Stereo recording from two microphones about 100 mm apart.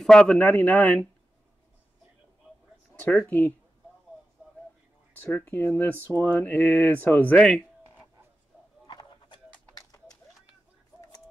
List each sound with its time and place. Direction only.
0.0 s speech: 5° left (ahead or behind)
3.1 s speech: 15° left (ahead or behind)
5.2 s speech: 15° left (ahead or behind)
8.8 s a sound: 50° left (ahead or behind)